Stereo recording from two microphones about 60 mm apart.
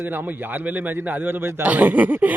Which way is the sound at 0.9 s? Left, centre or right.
Right.